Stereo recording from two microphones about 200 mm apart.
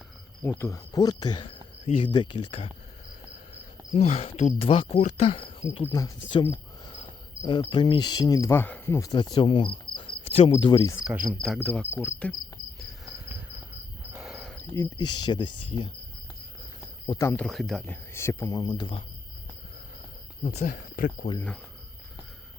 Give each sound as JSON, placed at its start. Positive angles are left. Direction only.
{"t": 0.4, "sound": "speech", "side_deg": 15}
{"t": 2.1, "sound": "cricket", "side_deg": 25}
{"t": 3.5, "sound": "speech", "side_deg": 30}
{"t": 7.4, "sound": "cricket", "side_deg": 20}
{"t": 11.4, "sound": "cricket", "side_deg": 0}
{"t": 14.2, "sound": "a sound", "side_deg": 0}
{"t": 14.8, "sound": "cricket", "side_deg": 20}
{"t": 17.2, "sound": "speech", "side_deg": 10}
{"t": 20.4, "sound": "speech", "side_deg": 30}
{"t": 21.3, "sound": "cricket", "side_deg": 5}